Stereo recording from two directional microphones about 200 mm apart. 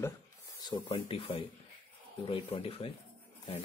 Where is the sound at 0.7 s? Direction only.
25° left (ahead or behind).